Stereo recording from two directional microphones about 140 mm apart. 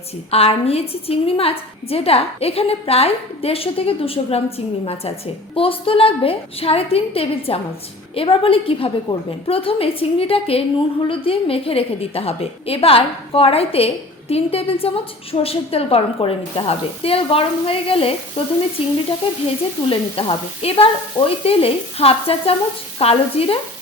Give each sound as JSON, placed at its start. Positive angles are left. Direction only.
{"t": 0.3, "sound": "a woman's voice", "side_deg": 45}